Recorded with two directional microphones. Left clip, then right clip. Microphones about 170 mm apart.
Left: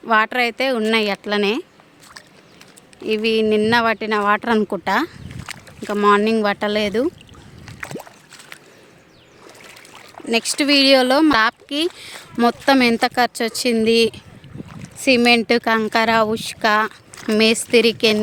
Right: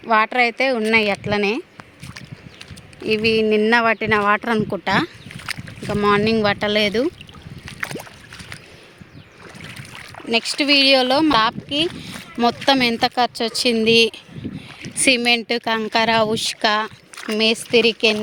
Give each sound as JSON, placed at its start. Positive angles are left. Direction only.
{"t": 0.0, "sound": "speech", "side_deg": 15}
{"t": 3.0, "sound": "speech", "side_deg": 0}
{"t": 5.5, "sound": "rowboat", "side_deg": -10}
{"t": 5.9, "sound": "speech", "side_deg": 10}
{"t": 7.6, "sound": "a sound", "side_deg": 0}
{"t": 9.6, "sound": "rowboat", "side_deg": 0}
{"t": 10.2, "sound": "speech", "side_deg": 15}
{"t": 11.9, "sound": "a sound", "side_deg": 20}
{"t": 12.6, "sound": "speech", "side_deg": 10}
{"t": 15.2, "sound": "speech", "side_deg": 10}
{"t": 17.3, "sound": "a woman's voice", "side_deg": 25}